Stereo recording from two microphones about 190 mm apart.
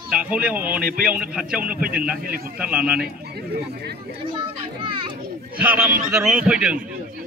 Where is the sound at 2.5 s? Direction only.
5° right (ahead or behind).